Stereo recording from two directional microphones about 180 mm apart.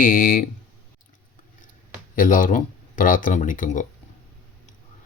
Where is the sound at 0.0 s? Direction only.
50° left (ahead or behind).